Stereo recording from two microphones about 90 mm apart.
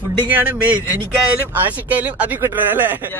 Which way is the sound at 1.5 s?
20° right (ahead or behind).